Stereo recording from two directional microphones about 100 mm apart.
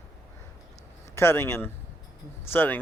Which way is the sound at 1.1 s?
25° left (ahead or behind).